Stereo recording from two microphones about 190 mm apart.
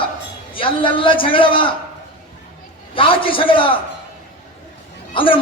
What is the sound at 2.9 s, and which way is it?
Speech, 25° left (ahead or behind).